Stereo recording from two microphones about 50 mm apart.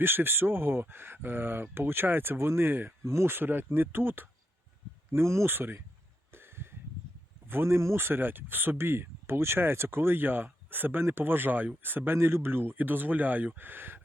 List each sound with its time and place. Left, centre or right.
0.0 s speech: right
3.0 s speech: right
3.3 s speech: right
5.1 s speech: right
5.5 s speech: right
6.3 s a sound: right
7.4 s speech: right